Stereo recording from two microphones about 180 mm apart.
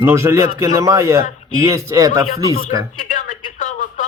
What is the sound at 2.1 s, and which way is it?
Speech, 50° left (ahead or behind).